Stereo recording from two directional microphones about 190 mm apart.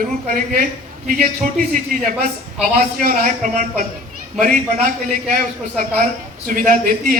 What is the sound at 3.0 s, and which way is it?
Speech, 45° right (ahead or behind).